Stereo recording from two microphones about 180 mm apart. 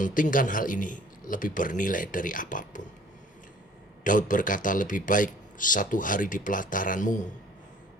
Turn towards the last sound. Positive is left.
turn(degrees=45)  # may be behind; listen again after turning